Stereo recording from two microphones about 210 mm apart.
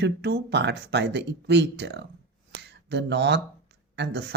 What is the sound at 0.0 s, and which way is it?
Speech, 50° right (ahead or behind).